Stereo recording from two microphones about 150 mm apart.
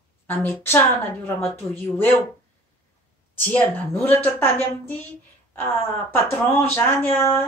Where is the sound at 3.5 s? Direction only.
10° left (ahead or behind).